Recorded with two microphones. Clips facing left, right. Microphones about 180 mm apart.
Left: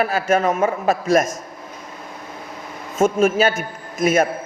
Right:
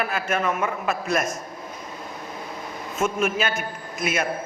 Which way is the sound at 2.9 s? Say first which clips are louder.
Left 8 dB; 40° left (ahead or behind).